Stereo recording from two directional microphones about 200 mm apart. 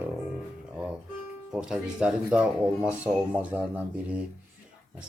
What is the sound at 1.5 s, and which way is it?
Speech, 5° right (ahead or behind).